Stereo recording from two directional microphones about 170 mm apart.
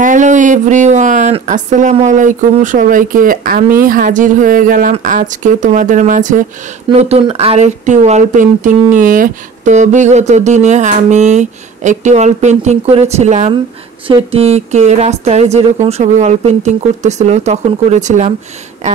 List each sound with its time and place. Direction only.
0.0 s speech: 50° right (ahead or behind)
6.9 s speech: 35° right (ahead or behind)